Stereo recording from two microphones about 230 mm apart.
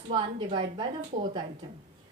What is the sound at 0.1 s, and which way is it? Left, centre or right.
Speech, right.